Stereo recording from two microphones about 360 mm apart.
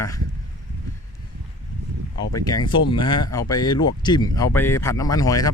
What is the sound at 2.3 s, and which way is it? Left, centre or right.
Speech, centre.